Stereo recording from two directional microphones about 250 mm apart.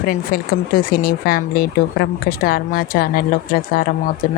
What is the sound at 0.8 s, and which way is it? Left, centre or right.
Speech, left.